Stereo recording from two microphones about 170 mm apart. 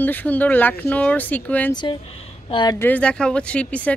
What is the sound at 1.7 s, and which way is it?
Speech, 25° left (ahead or behind).